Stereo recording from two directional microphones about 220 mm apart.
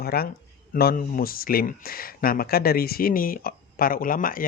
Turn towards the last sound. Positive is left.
turn(degrees=40)  # may be behind; listen again after turning